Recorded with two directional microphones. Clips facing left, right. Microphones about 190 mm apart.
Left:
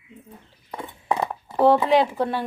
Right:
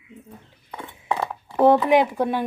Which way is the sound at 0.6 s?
10° left (ahead or behind).